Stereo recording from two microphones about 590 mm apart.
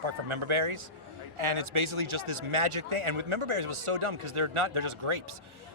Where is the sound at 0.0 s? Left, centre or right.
Right.